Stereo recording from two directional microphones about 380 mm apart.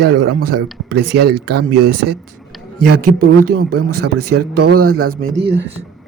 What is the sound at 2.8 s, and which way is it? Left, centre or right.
Speech, right.